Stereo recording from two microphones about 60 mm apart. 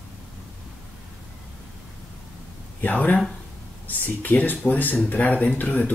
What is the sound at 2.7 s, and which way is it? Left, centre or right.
Speech, left.